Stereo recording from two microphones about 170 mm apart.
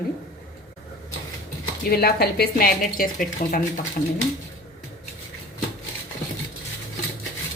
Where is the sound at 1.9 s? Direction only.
65° left (ahead or behind).